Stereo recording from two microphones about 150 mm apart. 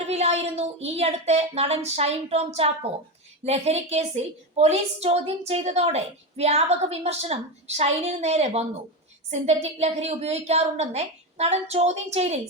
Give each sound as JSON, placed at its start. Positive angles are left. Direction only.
{"t": 0.1, "sound": "a woman's voice", "side_deg": -45}